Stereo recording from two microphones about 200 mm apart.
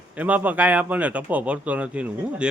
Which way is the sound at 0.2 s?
10° right (ahead or behind).